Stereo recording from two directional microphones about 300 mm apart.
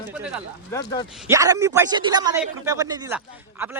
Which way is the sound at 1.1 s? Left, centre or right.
Centre.